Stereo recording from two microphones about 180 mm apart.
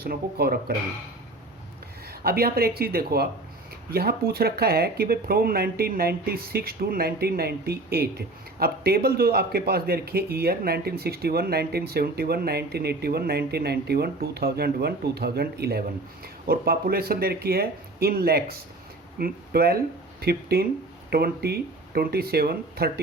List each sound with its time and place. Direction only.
0.0 s speech: 60° right (ahead or behind)
2.0 s speech: 60° right (ahead or behind)